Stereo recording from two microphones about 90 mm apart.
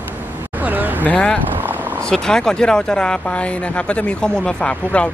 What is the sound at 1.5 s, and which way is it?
Vehicle, 20° right (ahead or behind).